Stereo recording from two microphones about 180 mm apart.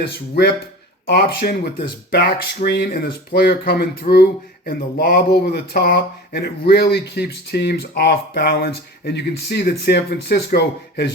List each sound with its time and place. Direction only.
1.0 s speech: 60° left (ahead or behind)